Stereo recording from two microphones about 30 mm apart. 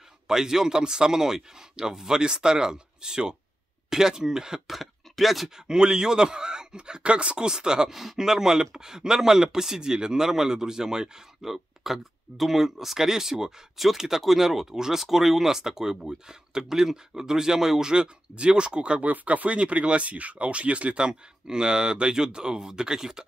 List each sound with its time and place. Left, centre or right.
0.3 s a man's voice: centre
4.6 s speech: centre
5.7 s a man's voice: right
7.0 s speech: right
7.3 s a man's voice: right
7.9 s a man's voice: centre
11.4 s a man's voice: centre; by 18.9 s right
18.9 s speech: right
21.0 s a man's voice: right